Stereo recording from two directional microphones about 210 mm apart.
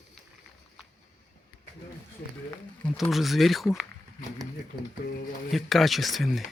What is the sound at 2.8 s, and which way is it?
Speech, centre (ahead or behind).